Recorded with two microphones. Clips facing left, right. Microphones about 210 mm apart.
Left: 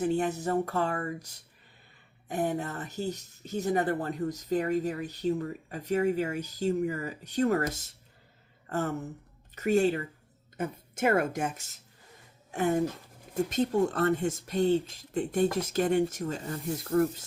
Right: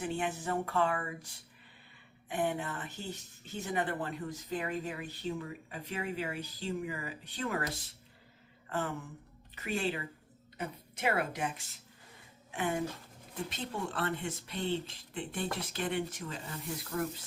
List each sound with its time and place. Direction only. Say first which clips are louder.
0.0 s speech: left 7 dB; 40° left (ahead or behind)
2.3 s speech: left 4 dB; 40° left (ahead or behind)